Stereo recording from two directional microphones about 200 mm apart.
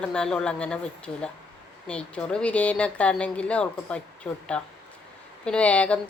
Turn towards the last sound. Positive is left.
turn(degrees=5)  # may be behind; listen again after turning